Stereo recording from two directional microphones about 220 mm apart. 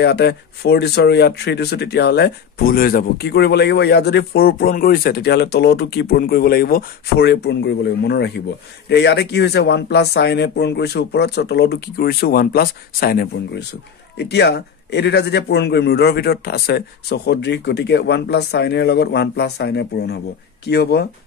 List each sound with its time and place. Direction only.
0.0 s speech: 50° left (ahead or behind)